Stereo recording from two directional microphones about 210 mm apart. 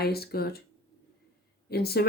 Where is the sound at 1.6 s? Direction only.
50° left (ahead or behind).